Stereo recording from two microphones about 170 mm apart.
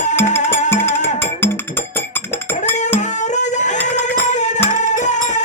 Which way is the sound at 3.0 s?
45° left (ahead or behind).